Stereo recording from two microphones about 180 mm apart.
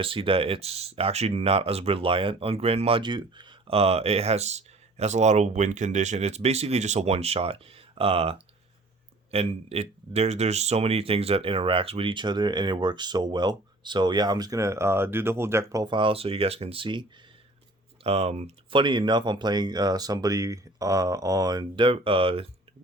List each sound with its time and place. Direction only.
0.0 s speech: 30° right (ahead or behind)